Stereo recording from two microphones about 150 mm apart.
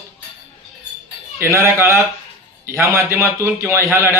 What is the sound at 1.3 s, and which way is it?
A man's voice, 20° right (ahead or behind).